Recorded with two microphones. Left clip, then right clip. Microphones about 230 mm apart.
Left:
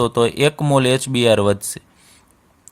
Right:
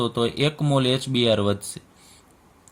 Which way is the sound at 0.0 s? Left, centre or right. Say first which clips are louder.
Left 7 dB; left.